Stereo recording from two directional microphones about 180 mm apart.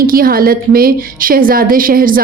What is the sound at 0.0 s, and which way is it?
A woman's voice, 55° right (ahead or behind).